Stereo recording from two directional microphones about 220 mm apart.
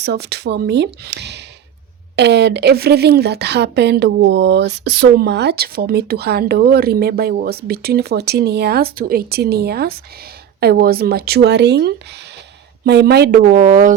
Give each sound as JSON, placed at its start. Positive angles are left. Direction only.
{"t": 0.0, "sound": "speech", "side_deg": -50}